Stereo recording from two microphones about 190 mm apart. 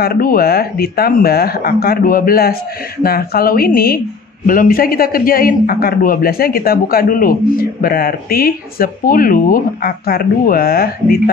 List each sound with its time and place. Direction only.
0.0 s a man's voice: 50° left (ahead or behind)